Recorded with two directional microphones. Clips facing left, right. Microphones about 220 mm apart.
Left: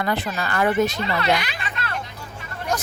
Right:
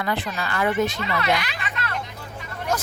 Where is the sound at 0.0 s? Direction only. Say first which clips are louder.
Left 2 dB; 40° left (ahead or behind).